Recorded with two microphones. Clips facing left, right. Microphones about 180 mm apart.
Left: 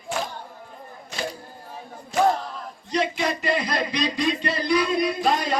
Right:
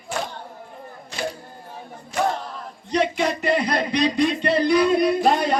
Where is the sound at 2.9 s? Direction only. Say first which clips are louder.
Right 3 dB; 60° right (ahead or behind).